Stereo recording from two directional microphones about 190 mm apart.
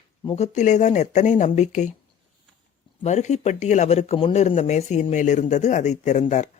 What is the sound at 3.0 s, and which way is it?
Speech, 35° left (ahead or behind).